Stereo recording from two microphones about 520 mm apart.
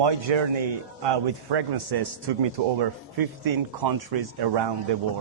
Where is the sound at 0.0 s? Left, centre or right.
Right.